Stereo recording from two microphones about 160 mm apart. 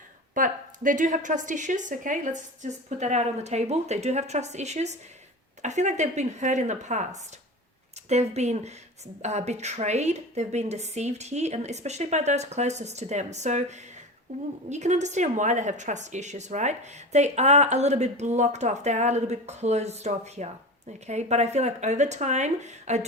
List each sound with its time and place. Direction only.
0.3 s speech: 55° right (ahead or behind)